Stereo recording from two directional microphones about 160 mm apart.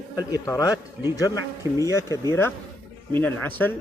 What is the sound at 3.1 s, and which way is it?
Speech, 10° left (ahead or behind).